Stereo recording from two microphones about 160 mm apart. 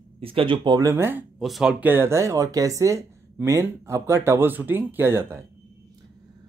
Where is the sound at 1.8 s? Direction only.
15° right (ahead or behind).